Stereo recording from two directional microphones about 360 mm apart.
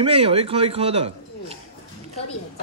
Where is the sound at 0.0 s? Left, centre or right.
Centre.